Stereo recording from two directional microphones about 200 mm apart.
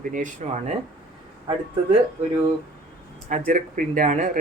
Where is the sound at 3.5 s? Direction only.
40° right (ahead or behind).